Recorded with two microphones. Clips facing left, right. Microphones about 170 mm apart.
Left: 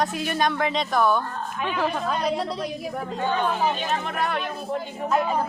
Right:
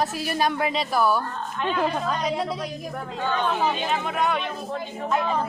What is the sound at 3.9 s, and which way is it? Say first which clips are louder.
Speech: right 2 dB; centre (ahead or behind).